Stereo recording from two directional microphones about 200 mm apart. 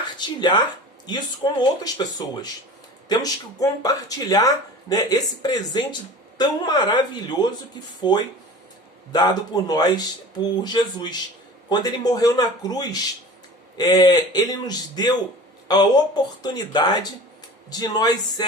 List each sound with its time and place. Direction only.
0.2 s speech: 20° left (ahead or behind)